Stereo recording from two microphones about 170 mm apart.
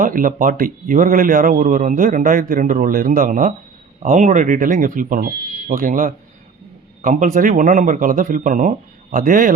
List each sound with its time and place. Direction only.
0.0 s a man's voice: 55° right (ahead or behind)